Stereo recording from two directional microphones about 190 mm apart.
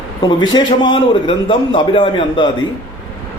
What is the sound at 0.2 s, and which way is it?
A man's voice, 20° left (ahead or behind).